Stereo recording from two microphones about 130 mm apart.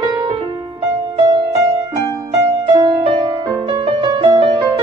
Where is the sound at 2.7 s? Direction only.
35° right (ahead or behind).